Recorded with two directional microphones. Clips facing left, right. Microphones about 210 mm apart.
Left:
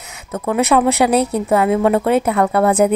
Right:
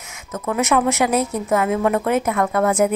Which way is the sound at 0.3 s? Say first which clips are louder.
Left 4 dB; 35° left (ahead or behind).